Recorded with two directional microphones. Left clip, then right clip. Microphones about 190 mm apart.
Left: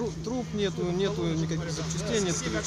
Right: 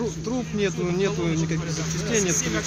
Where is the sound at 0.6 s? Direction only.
10° left (ahead or behind).